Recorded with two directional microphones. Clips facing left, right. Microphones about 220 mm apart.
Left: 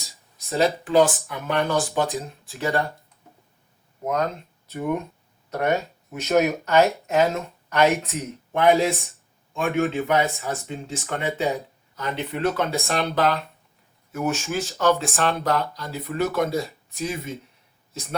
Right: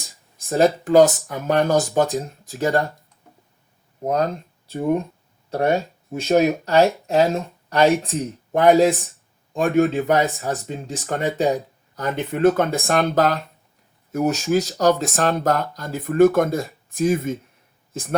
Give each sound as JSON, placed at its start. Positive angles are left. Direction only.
{"t": 0.0, "sound": "speech", "side_deg": -50}
{"t": 4.0, "sound": "speech", "side_deg": -35}